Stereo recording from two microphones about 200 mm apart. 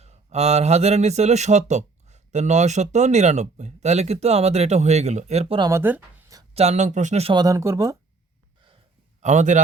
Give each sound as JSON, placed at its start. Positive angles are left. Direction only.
{"t": 0.0, "sound": "speech", "side_deg": -35}
{"t": 6.5, "sound": "speech", "side_deg": -35}
{"t": 7.4, "sound": "speech", "side_deg": -15}
{"t": 9.2, "sound": "speech", "side_deg": -35}